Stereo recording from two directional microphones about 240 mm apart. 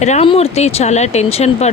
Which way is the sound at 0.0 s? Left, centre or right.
Left.